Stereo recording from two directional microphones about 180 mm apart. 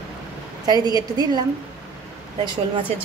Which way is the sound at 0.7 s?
20° right (ahead or behind).